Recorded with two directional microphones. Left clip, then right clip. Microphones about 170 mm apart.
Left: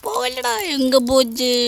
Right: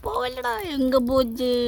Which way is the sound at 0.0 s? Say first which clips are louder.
Left 5 dB; 15° left (ahead or behind).